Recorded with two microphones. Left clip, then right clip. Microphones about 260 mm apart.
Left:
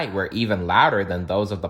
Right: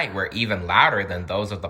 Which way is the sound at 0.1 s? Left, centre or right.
Centre.